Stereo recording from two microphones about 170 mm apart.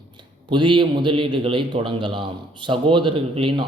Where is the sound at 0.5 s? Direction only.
30° right (ahead or behind).